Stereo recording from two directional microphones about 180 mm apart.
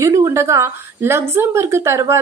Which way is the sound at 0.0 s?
15° right (ahead or behind).